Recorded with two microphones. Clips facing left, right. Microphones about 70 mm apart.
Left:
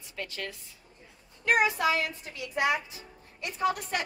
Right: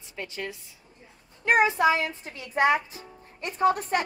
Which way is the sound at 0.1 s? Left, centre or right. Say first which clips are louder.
Right 3 dB; centre.